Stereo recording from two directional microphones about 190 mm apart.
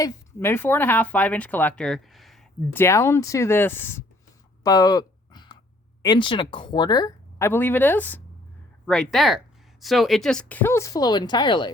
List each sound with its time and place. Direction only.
0.0 s speech: 10° left (ahead or behind)
2.7 s speech: 15° left (ahead or behind)
4.6 s a sound: 20° left (ahead or behind)
6.0 s speech: 25° left (ahead or behind)